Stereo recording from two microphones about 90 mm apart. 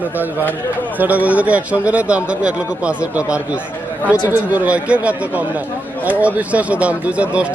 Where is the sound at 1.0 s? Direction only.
20° right (ahead or behind).